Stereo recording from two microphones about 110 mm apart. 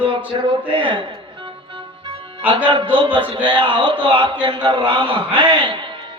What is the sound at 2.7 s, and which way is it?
Speech, 50° right (ahead or behind).